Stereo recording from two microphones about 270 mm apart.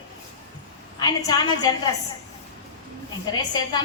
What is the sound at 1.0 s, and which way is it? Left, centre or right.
Speech, centre.